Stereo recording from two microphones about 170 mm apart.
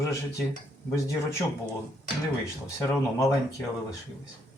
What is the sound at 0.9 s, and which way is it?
Speech, 20° left (ahead or behind).